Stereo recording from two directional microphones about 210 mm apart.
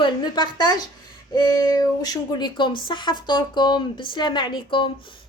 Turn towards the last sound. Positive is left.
turn(degrees=25)  # may be behind; listen again after turning